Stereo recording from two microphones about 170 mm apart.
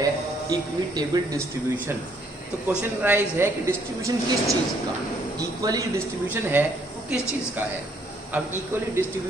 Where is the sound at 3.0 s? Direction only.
15° right (ahead or behind).